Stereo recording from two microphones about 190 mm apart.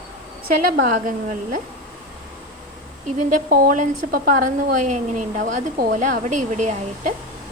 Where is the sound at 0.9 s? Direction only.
40° right (ahead or behind).